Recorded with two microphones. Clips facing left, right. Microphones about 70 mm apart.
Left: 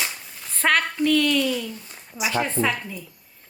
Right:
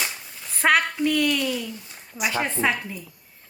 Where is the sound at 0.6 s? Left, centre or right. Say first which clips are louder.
Right 1 dB; centre.